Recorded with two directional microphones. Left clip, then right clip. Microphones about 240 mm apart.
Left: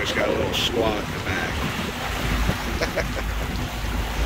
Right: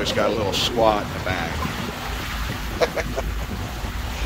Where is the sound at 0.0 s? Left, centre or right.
Centre.